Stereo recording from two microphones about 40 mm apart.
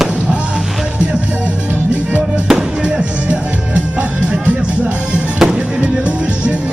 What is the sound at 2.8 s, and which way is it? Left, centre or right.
Music, right.